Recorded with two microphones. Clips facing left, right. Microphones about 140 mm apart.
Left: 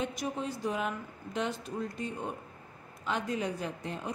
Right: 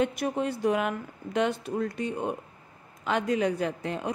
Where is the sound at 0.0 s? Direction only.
65° right (ahead or behind).